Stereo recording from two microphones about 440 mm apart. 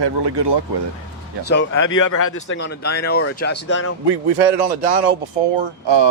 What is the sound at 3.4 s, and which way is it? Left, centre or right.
Speech, left.